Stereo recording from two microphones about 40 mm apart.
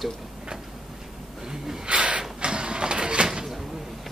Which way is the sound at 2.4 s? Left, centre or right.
Right.